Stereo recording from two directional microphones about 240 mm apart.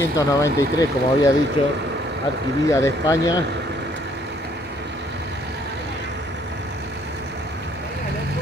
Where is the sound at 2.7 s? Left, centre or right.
Centre.